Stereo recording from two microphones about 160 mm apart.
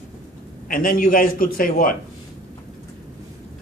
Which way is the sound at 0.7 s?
60° left (ahead or behind).